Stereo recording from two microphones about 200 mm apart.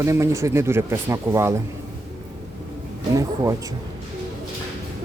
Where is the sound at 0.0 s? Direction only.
15° right (ahead or behind).